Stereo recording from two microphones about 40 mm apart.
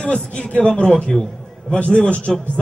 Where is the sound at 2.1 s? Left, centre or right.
Left.